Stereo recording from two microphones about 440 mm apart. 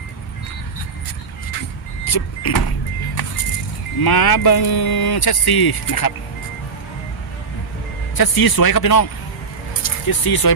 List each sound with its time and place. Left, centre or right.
2.0 s vehicle: left
4.0 s speech: left
8.1 s speech: left